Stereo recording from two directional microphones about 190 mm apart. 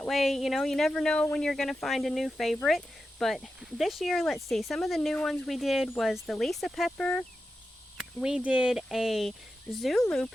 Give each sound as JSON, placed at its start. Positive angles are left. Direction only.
{"t": 0.1, "sound": "speech", "side_deg": 0}